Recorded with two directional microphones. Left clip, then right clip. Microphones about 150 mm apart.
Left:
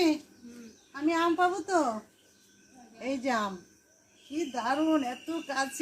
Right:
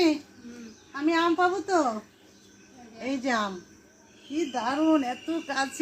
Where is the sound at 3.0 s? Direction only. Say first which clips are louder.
Right 2 dB; 20° left (ahead or behind).